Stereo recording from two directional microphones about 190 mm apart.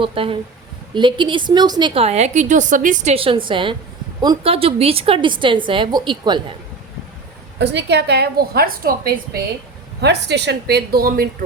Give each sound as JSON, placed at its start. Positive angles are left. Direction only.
{"t": 0.0, "sound": "a woman's voice", "side_deg": -30}
{"t": 7.6, "sound": "a woman's voice", "side_deg": -65}